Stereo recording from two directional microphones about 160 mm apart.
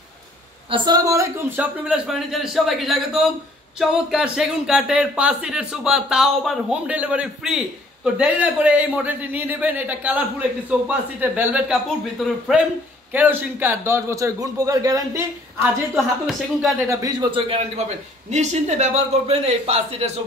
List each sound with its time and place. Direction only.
0.7 s speech: 30° right (ahead or behind)
1.9 s speech: centre (ahead or behind)
13.1 s speech: 10° right (ahead or behind)
15.6 s speech: centre (ahead or behind)
16.7 s a man's voice: 20° right (ahead or behind); by 20.1 s 40° right (ahead or behind)